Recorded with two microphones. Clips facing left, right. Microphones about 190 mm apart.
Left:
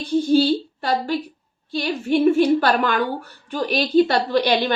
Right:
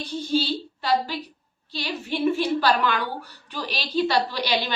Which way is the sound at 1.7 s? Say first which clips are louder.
Left 9 dB; 50° left (ahead or behind).